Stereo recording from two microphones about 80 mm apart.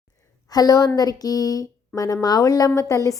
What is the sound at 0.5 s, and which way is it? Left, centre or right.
A woman's voice, left.